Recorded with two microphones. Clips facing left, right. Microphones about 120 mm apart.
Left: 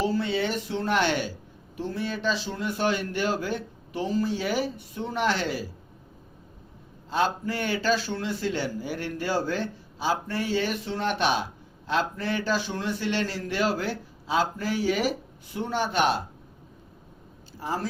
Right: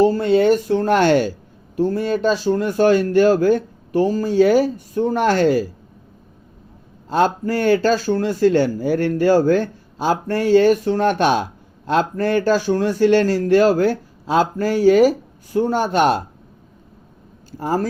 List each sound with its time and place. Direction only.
0.0 s speech: 50° right (ahead or behind)
7.1 s speech: 45° right (ahead or behind)
17.6 s speech: 45° right (ahead or behind)